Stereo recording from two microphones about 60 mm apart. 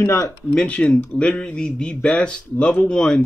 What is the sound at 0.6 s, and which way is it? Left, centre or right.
Speech, centre.